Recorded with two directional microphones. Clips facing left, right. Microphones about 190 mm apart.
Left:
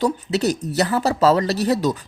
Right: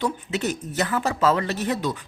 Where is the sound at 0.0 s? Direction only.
40° left (ahead or behind).